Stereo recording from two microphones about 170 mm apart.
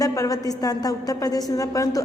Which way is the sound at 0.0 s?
20° left (ahead or behind).